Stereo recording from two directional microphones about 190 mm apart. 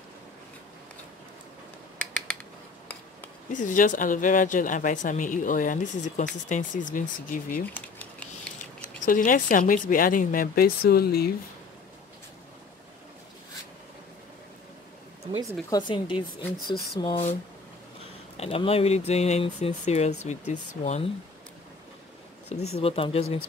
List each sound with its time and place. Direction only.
2.0 s a sound: 5° left (ahead or behind)
3.5 s speech: 45° left (ahead or behind)
7.6 s a sound: 10° left (ahead or behind)
9.0 s speech: 45° left (ahead or behind)
15.7 s a woman's voice: 25° left (ahead or behind)
16.5 s speech: 50° left (ahead or behind)
17.0 s a woman's voice: 30° left (ahead or behind)
18.4 s speech: 30° left (ahead or behind)
22.8 s speech: 30° left (ahead or behind)